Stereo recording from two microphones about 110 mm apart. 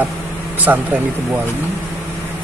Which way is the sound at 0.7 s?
15° right (ahead or behind).